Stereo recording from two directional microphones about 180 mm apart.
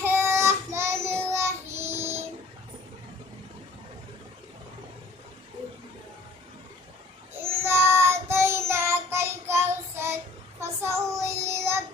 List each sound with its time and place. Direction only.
0.0 s child singing: 15° right (ahead or behind)
7.4 s child singing: 15° right (ahead or behind)